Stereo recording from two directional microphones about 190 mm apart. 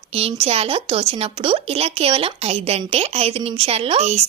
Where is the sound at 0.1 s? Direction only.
30° right (ahead or behind).